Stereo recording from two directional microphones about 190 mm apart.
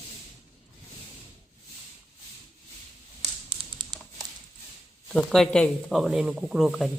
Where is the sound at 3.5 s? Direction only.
25° right (ahead or behind).